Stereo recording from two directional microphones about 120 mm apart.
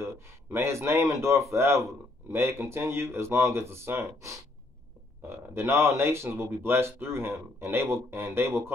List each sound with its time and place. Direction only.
0.0 s speech: 20° right (ahead or behind)